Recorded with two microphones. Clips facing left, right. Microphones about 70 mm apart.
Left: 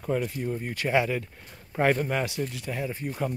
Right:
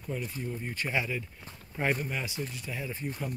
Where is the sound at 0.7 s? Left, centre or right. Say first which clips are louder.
Left 8 dB; left.